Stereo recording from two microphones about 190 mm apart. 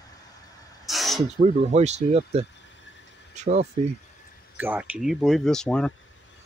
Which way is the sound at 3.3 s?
35° right (ahead or behind).